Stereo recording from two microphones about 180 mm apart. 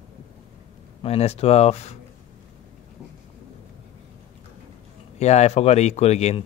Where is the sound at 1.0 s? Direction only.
35° left (ahead or behind).